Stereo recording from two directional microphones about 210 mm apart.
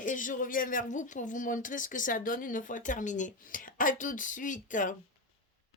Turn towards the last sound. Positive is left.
turn(degrees=40)  # may be behind; listen again after turning